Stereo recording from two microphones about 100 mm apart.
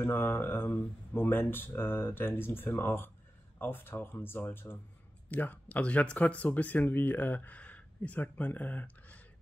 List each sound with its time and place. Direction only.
0.0 s speech: 20° left (ahead or behind)